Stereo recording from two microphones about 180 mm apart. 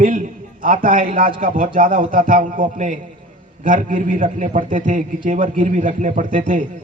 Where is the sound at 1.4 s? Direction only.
50° right (ahead or behind).